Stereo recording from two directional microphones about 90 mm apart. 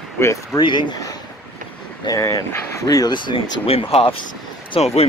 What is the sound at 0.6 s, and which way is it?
Speech, 60° left (ahead or behind).